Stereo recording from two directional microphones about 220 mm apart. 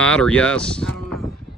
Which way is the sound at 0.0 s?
5° left (ahead or behind).